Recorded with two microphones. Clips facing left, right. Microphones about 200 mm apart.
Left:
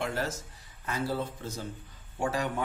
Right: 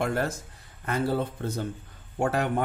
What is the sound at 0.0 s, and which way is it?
Speech, 55° right (ahead or behind).